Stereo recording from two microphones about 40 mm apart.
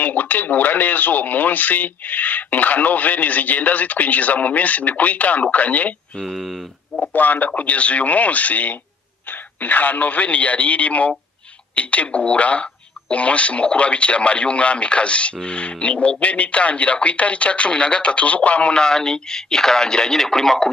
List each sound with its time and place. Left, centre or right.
0.0 s speech: left
6.2 s speech: centre
7.0 s speech: left
18.7 s speech: centre